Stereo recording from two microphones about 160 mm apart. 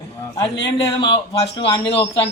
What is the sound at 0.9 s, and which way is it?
A man's voice, 30° left (ahead or behind).